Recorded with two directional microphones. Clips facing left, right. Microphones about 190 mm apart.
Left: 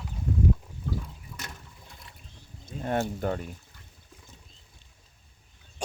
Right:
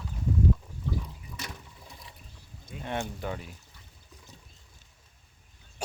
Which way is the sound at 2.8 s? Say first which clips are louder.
Left 6 dB; 45° left (ahead or behind).